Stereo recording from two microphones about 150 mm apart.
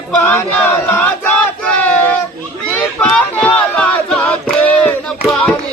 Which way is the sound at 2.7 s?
5° left (ahead or behind).